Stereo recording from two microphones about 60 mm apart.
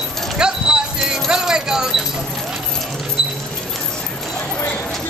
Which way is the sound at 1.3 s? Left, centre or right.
Centre.